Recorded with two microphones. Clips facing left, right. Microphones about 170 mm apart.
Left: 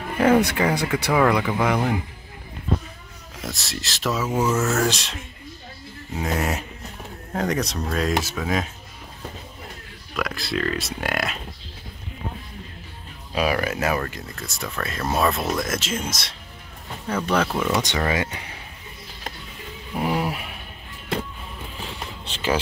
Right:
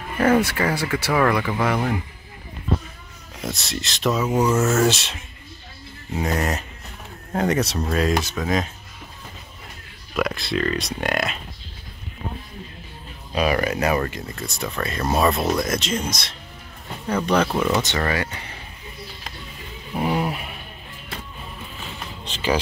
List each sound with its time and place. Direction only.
0.2 s speech: 15° left (ahead or behind)
3.3 s speech: centre (ahead or behind)
6.1 s speech: centre (ahead or behind)
10.1 s speech: centre (ahead or behind)
13.3 s speech: 5° left (ahead or behind)
17.5 s speech: 5° right (ahead or behind)
17.8 s speech: 15° left (ahead or behind)
20.0 s a sound: 5° left (ahead or behind)
22.3 s a sound: 10° right (ahead or behind)